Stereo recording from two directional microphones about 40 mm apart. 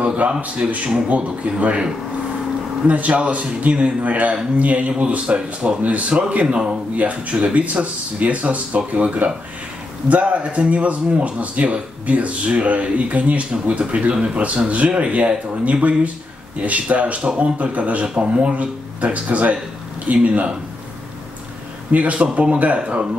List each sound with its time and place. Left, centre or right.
0.0 s speech: right
0.6 s speech: right
1.0 s speech: right
2.9 s speech: right
6.4 s speech: right
7.0 s speech: right
21.9 s speech: right